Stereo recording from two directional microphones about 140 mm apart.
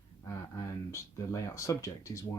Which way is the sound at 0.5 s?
20° left (ahead or behind).